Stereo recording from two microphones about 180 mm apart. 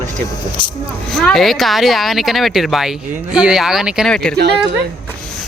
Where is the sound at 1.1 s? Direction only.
Centre (ahead or behind).